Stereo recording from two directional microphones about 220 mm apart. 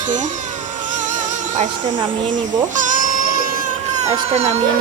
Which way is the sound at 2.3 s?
35° right (ahead or behind).